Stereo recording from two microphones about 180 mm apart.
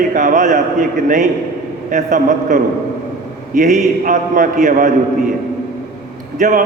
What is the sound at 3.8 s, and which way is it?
A man's voice, 45° right (ahead or behind).